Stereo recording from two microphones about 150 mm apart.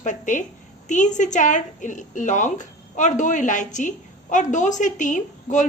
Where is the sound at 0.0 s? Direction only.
60° left (ahead or behind).